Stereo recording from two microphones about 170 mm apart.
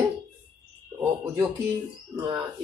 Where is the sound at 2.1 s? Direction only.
25° right (ahead or behind).